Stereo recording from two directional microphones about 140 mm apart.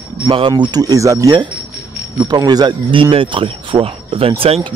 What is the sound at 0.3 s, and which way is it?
Speech, 40° right (ahead or behind).